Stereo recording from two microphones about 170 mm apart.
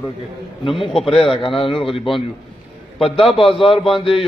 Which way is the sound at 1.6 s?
30° left (ahead or behind).